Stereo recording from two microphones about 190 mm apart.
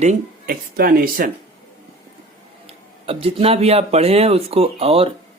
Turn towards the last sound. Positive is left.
turn(degrees=-30)  # may be behind; listen again after turning